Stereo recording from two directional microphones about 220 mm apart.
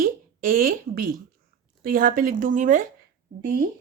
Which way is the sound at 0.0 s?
40° right (ahead or behind).